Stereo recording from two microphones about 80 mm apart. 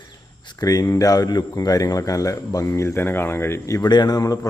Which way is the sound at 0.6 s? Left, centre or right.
Left.